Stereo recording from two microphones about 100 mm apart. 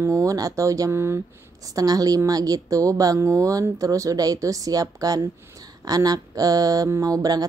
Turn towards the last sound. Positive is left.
turn(degrees=-35)  # may be behind; listen again after turning